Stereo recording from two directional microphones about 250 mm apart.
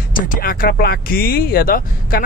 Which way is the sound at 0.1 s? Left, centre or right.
Left.